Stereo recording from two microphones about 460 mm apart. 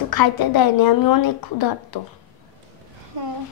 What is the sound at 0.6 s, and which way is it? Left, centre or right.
A woman's voice, left.